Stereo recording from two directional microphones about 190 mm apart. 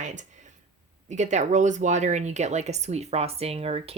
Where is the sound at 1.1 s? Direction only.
40° right (ahead or behind).